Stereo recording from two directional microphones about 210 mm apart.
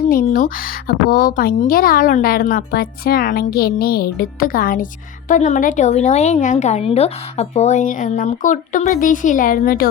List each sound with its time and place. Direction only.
0.1 s a woman's voice: 40° left (ahead or behind)